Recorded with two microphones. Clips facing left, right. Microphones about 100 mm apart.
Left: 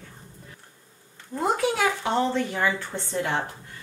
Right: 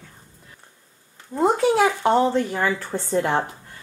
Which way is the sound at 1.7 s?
40° right (ahead or behind).